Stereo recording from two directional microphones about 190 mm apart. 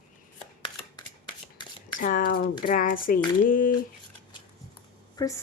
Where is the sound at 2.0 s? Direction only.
45° left (ahead or behind).